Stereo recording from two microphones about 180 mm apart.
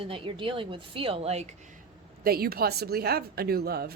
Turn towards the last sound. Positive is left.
turn(degrees=-60)  # may be behind; listen again after turning